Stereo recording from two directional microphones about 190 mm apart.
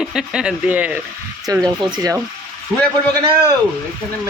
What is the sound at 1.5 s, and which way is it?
Speech, 20° right (ahead or behind).